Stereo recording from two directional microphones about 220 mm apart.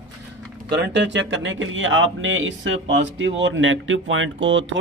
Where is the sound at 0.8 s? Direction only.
55° right (ahead or behind).